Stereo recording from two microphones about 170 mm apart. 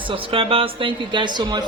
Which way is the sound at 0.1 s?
30° right (ahead or behind).